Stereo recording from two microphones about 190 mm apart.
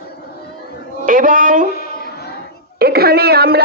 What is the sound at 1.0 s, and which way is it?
Speech, 45° right (ahead or behind).